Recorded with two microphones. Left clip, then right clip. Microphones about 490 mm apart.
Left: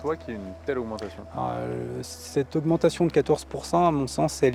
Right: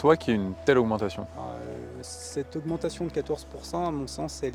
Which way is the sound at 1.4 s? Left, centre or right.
Left.